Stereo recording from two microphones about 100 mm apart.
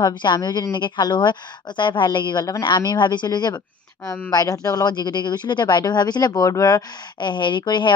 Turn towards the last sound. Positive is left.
turn(degrees=50)  # may be behind; listen again after turning